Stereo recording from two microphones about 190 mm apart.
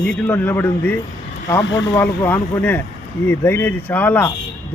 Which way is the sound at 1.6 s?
75° left (ahead or behind).